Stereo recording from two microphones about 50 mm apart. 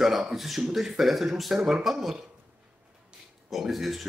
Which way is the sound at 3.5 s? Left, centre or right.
Centre.